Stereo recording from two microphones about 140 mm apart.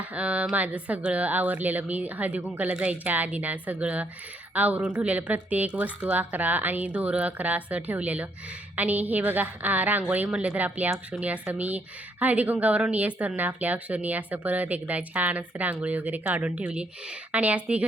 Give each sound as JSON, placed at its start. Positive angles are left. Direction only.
{"t": 0.0, "sound": "a woman's voice", "side_deg": -10}